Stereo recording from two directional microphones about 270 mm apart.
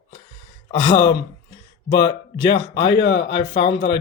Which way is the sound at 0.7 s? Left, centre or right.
Centre.